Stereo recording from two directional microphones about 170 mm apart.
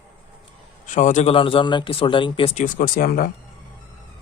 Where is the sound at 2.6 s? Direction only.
50° left (ahead or behind).